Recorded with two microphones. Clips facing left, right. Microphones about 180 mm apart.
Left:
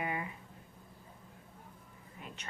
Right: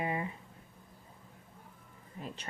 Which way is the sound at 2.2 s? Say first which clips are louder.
Right 6 dB; 35° right (ahead or behind).